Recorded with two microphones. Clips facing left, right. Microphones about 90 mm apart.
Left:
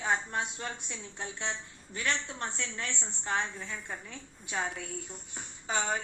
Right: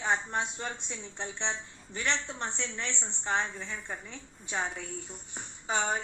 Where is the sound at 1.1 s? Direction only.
30° right (ahead or behind).